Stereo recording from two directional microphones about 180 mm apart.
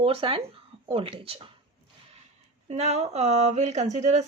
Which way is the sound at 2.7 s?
35° right (ahead or behind).